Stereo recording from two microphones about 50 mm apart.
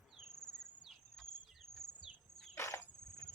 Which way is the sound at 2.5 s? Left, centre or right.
Left.